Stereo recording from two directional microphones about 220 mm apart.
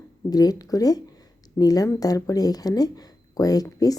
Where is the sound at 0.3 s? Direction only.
15° left (ahead or behind).